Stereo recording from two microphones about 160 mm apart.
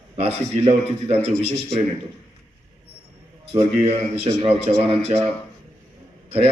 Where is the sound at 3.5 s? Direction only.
40° right (ahead or behind).